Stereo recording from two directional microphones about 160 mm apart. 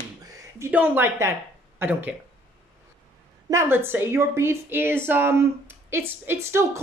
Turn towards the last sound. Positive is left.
turn(degrees=-15)  # may be behind; listen again after turning